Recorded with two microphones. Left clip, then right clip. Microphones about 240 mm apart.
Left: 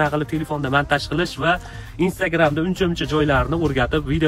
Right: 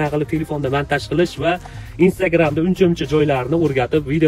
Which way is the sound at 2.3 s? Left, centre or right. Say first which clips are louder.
Right 2 dB; centre.